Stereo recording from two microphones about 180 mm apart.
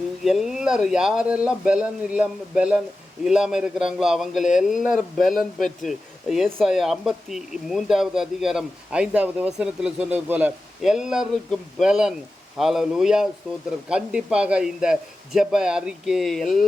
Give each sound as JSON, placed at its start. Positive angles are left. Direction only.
{"t": 0.3, "sound": "speech", "side_deg": 0}